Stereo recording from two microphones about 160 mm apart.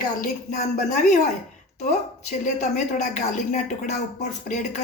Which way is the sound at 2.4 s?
50° left (ahead or behind).